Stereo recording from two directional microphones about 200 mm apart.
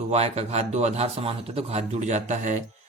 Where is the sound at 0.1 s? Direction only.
35° right (ahead or behind).